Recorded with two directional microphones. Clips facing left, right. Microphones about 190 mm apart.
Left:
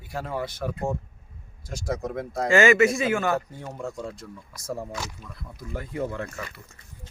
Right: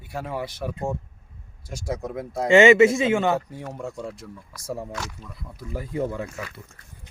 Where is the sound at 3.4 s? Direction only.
5° right (ahead or behind).